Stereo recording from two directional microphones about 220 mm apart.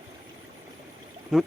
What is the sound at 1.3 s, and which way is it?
Speech, centre (ahead or behind).